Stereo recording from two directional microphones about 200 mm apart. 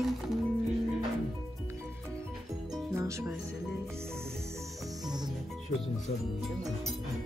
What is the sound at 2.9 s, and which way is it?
Speech, 15° right (ahead or behind).